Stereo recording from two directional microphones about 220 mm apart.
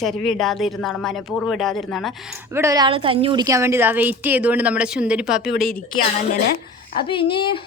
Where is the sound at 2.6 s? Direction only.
15° right (ahead or behind).